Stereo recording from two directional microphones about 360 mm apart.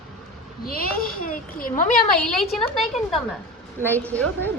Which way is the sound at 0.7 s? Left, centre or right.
Left.